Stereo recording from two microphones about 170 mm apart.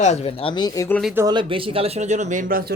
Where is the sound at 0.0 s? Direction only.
40° left (ahead or behind); by 0.9 s 20° left (ahead or behind).